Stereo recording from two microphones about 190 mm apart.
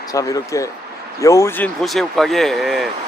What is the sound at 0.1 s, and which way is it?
Speech, 20° left (ahead or behind).